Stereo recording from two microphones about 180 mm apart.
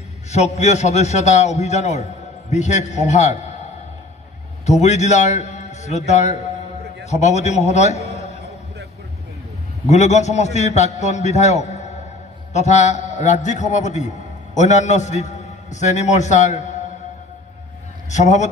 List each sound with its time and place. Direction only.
0.3 s a man's voice: 40° left (ahead or behind)
4.6 s a man's voice: 40° left (ahead or behind)
9.8 s a man's voice: 40° left (ahead or behind)
18.1 s a man's voice: 40° left (ahead or behind)